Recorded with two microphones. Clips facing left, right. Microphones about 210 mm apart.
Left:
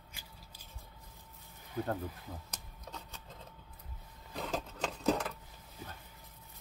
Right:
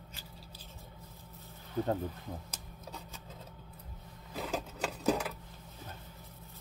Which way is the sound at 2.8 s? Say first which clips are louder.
Right 1 dB; 5° right (ahead or behind).